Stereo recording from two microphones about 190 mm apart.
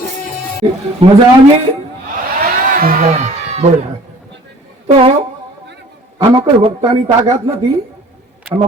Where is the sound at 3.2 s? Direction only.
35° right (ahead or behind).